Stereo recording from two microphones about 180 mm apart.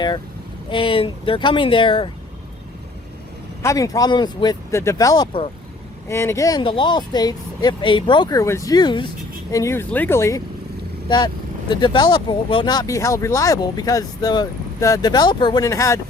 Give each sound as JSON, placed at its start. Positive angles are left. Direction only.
{"t": 0.7, "sound": "speech", "side_deg": 30}
{"t": 3.6, "sound": "speech", "side_deg": 20}
{"t": 6.1, "sound": "speech", "side_deg": 15}
{"t": 11.7, "sound": "speech", "side_deg": 25}